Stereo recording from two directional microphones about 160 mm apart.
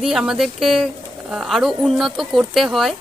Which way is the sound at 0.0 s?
5° right (ahead or behind).